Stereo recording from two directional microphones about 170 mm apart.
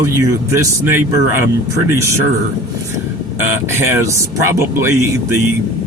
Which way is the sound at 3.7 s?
15° right (ahead or behind).